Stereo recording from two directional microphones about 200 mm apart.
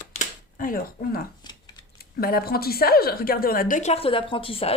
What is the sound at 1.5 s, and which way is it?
Scissors, 20° left (ahead or behind).